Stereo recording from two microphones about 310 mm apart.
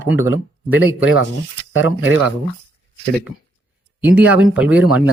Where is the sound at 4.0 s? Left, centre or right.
Centre.